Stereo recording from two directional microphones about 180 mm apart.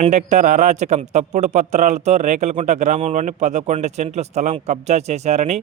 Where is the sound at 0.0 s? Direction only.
40° right (ahead or behind).